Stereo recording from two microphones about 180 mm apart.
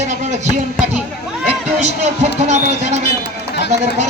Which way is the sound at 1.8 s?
40° right (ahead or behind).